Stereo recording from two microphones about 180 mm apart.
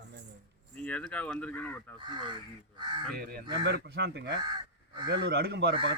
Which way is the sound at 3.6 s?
70° right (ahead or behind).